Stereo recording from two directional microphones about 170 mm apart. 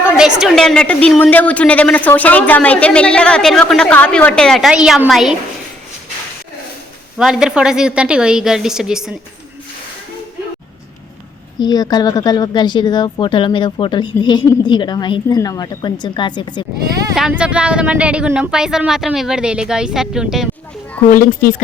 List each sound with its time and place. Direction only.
0.3 s a woman's voice: centre (ahead or behind)
7.2 s a woman's voice: 5° right (ahead or behind)
11.6 s a woman's voice: 25° left (ahead or behind)
17.2 s a woman's voice: 5° right (ahead or behind)
21.1 s speech: 55° left (ahead or behind)